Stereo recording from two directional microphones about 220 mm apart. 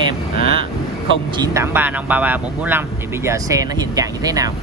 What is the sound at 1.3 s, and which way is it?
Speech, 15° right (ahead or behind).